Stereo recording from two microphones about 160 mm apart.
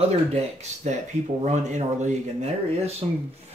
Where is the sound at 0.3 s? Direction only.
45° right (ahead or behind).